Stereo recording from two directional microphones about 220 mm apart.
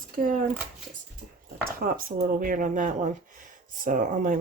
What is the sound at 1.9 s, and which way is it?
Speech, 40° right (ahead or behind).